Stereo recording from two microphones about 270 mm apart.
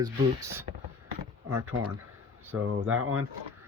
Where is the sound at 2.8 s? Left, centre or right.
Right.